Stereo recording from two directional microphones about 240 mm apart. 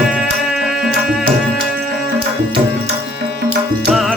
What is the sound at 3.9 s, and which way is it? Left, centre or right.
Music, centre.